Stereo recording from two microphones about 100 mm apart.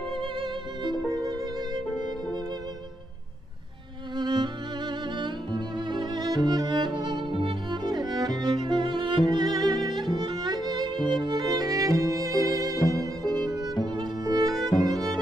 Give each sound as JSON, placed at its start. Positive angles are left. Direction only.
{"t": 0.2, "sound": "music", "side_deg": -60}
{"t": 4.2, "sound": "music", "side_deg": -45}
{"t": 13.2, "sound": "music", "side_deg": 5}
{"t": 13.9, "sound": "music", "side_deg": -40}
{"t": 14.5, "sound": "music", "side_deg": 0}
{"t": 14.9, "sound": "music", "side_deg": -40}